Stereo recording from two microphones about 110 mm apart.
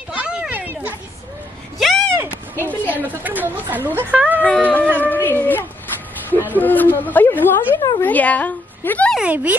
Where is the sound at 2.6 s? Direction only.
15° left (ahead or behind).